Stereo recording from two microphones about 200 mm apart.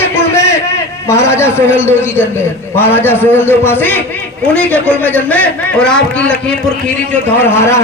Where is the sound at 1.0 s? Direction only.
15° left (ahead or behind).